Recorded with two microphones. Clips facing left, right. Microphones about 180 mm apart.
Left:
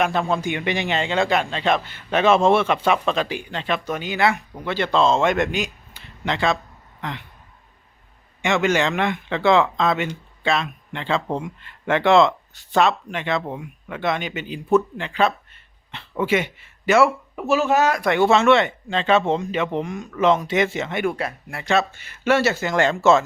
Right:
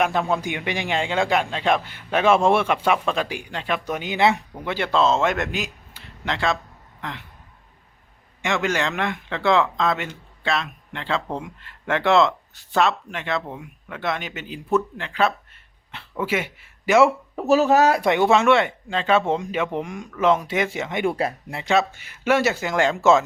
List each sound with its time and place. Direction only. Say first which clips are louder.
0.0 s a man's voice: left 1 dB; 15° right (ahead or behind)
8.4 s speech: left 4 dB; centre (ahead or behind)
17.3 s speech: right 4 dB; 40° right (ahead or behind)
18.0 s a man's voice: left 1 dB; 15° right (ahead or behind)
21.1 s speech: right 3 dB; 35° right (ahead or behind)
21.5 s a man's voice: left 1 dB; 15° right (ahead or behind)